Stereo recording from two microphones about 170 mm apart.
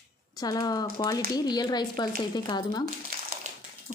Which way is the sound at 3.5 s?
45° right (ahead or behind).